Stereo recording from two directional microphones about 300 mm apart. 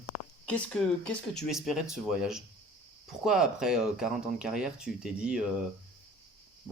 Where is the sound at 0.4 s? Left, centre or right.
Centre.